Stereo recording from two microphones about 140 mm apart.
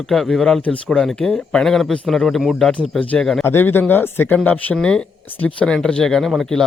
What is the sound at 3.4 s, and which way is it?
A man's voice, 15° left (ahead or behind).